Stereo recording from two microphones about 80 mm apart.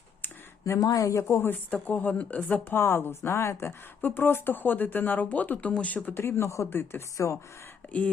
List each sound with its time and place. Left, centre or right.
0.6 s speech: left
6.7 s speech: left
7.2 s speech: left